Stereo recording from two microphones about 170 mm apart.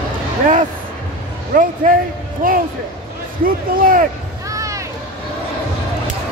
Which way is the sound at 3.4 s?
55° right (ahead or behind).